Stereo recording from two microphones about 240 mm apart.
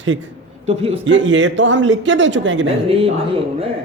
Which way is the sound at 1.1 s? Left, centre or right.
Right.